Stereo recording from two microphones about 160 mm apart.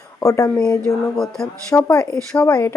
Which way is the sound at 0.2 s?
20° left (ahead or behind).